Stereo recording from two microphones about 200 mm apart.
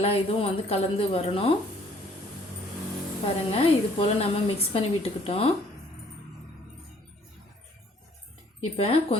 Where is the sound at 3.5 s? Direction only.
30° left (ahead or behind).